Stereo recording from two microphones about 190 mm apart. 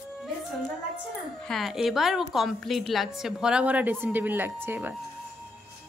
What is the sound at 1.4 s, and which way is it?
A woman's voice, centre (ahead or behind).